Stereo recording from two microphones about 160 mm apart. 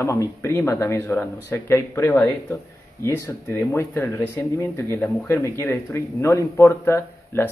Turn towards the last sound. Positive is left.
turn(degrees=15)  # may be behind; listen again after turning